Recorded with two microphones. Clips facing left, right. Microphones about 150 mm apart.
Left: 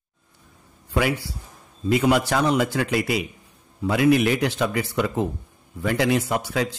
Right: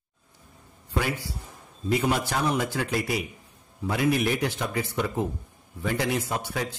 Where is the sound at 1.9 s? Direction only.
85° left.